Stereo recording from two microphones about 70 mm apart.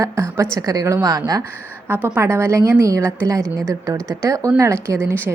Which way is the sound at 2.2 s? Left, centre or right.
Right.